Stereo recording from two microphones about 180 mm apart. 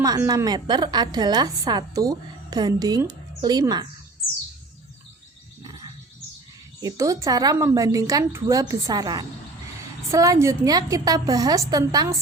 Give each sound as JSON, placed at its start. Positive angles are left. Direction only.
{"t": 0.0, "sound": "a woman's voice", "side_deg": -20}
{"t": 6.8, "sound": "a woman's voice", "side_deg": -20}